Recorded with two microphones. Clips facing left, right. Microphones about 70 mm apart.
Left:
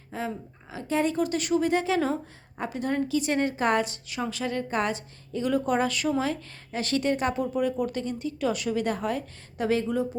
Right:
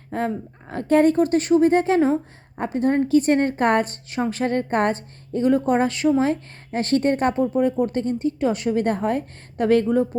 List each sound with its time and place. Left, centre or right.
0.1 s a woman's voice: right